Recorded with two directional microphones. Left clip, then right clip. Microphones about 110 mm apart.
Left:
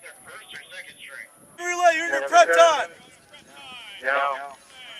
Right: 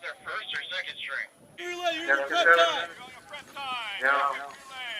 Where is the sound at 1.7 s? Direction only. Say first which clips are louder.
Left 11 dB; 30° left (ahead or behind).